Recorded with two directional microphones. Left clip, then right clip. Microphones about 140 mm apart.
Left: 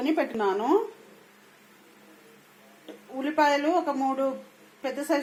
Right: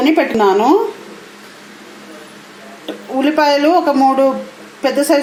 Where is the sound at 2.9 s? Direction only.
10° right (ahead or behind).